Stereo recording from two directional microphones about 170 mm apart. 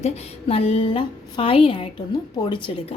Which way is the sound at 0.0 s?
35° left (ahead or behind).